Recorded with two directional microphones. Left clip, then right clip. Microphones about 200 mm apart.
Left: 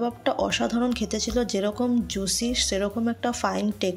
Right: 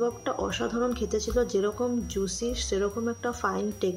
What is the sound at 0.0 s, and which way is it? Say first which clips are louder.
A woman's voice: left 3 dB; 40° left (ahead or behind).